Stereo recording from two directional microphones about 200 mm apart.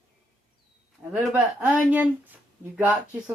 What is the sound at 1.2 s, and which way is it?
Speech, 5° right (ahead or behind).